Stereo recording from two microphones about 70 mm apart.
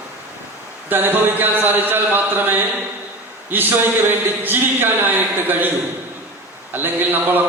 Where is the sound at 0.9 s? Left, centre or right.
Right.